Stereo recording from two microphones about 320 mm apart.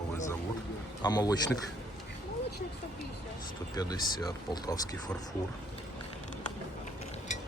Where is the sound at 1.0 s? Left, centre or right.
Centre.